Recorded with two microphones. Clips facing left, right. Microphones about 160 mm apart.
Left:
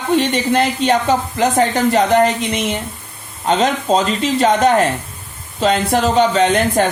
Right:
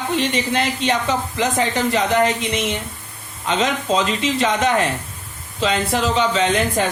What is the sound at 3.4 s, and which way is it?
Speech, 40° left (ahead or behind).